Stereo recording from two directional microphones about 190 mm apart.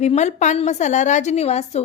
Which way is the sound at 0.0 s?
35° left (ahead or behind).